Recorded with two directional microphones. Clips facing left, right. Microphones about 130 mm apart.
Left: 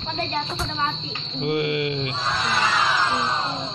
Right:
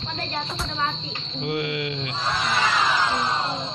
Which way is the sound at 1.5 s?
30° left (ahead or behind).